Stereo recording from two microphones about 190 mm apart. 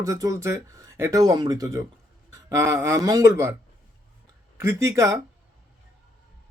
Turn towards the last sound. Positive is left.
turn(degrees=-15)  # may be behind; listen again after turning